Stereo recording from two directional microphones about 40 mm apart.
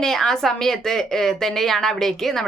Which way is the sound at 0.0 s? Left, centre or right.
Centre.